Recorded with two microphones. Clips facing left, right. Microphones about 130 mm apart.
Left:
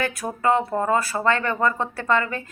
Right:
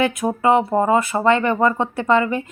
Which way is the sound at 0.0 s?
20° right (ahead or behind).